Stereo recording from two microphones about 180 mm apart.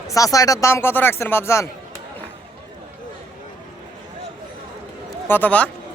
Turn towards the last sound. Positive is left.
turn(degrees=10)  # may be behind; listen again after turning